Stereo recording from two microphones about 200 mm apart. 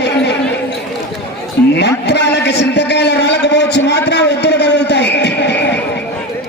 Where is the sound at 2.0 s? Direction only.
60° left (ahead or behind).